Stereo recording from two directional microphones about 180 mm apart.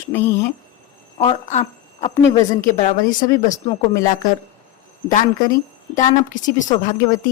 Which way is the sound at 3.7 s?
20° left (ahead or behind).